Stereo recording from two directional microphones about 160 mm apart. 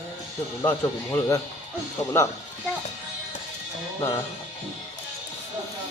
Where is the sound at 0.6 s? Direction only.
15° left (ahead or behind).